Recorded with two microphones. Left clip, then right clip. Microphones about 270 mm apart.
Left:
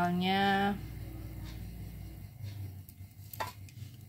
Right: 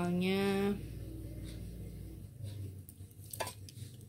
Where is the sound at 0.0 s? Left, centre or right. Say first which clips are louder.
Left 5 dB; centre.